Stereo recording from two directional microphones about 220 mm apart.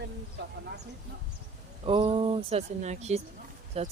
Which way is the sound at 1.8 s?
25° right (ahead or behind).